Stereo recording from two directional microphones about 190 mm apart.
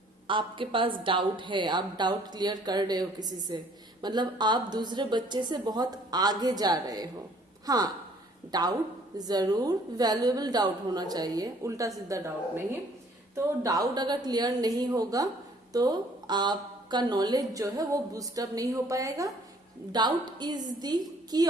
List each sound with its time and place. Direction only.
0.3 s a woman's voice: 25° right (ahead or behind)
13.3 s a woman's voice: 20° right (ahead or behind)